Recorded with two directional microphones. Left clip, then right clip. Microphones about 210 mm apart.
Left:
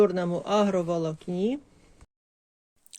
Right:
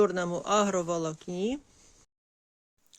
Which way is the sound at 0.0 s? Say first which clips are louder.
Left 3 dB; 10° right (ahead or behind).